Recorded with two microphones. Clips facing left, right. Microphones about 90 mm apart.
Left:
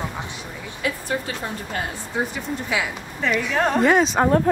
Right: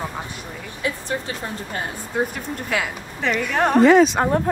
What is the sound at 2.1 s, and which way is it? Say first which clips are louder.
A woman's voice: right 2 dB; centre (ahead or behind).